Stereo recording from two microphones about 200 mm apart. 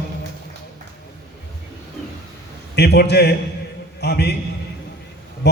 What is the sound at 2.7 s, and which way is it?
A man's voice, 55° left (ahead or behind).